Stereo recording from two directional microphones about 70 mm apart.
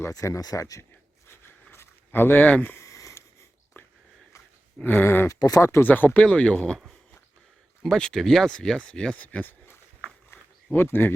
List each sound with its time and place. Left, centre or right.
0.1 s speech: left
1.3 s a sound: left
2.7 s a sound: left
3.8 s a sound: left
4.8 s speech: left
5.3 s speech: left
5.6 s speech: left
5.9 s speech: left
6.2 s speech: centre
7.9 s speech: centre
9.1 s speech: left
10.3 s a sound: left